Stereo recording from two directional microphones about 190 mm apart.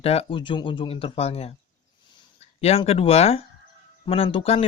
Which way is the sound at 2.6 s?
35° left (ahead or behind).